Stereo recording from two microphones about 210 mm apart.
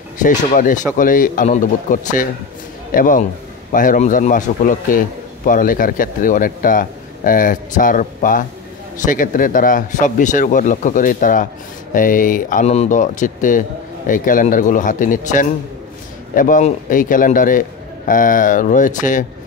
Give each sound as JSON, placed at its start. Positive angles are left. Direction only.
{"t": 0.2, "sound": "a man's voice", "side_deg": 40}